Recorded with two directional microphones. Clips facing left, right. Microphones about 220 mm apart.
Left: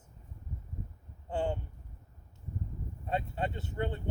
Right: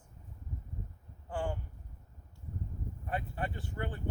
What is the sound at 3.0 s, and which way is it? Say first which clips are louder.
Speech: left 4 dB; 25° left (ahead or behind).